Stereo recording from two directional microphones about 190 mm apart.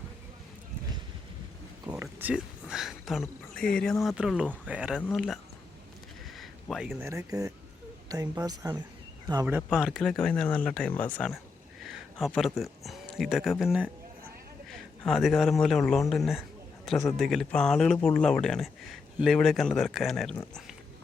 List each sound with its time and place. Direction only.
1.9 s speech: 10° right (ahead or behind)
4.9 s speech: 5° left (ahead or behind)
6.3 s a sound: centre (ahead or behind)
7.0 s speech: 15° right (ahead or behind)
9.6 s speech: 5° right (ahead or behind)
14.7 s a sound: centre (ahead or behind)
15.6 s speech: 5° left (ahead or behind)